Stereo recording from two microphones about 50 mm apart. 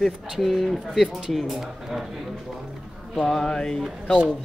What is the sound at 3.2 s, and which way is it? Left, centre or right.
Music, centre.